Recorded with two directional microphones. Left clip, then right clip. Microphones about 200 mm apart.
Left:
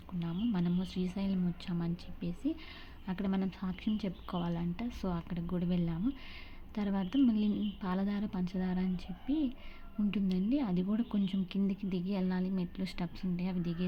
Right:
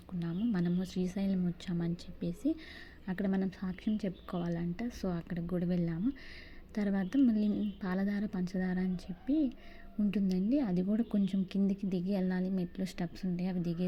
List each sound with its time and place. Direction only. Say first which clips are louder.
0.2 s speech: right 1 dB; 15° right (ahead or behind)
10.1 s speech: right 1 dB; 15° right (ahead or behind)